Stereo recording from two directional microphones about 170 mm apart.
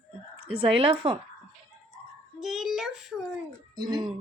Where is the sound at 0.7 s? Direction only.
30° right (ahead or behind).